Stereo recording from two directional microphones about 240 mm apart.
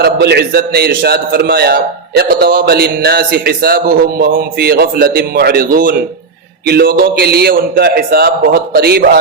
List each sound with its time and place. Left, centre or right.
0.0 s a man's voice: right